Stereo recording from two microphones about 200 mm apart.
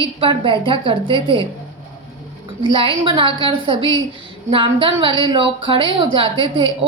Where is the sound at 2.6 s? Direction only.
25° right (ahead or behind).